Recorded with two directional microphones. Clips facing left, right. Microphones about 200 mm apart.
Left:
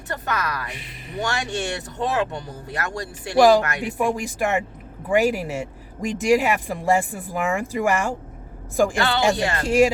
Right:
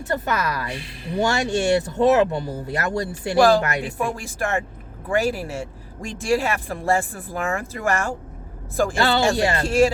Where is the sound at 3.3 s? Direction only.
15° left (ahead or behind).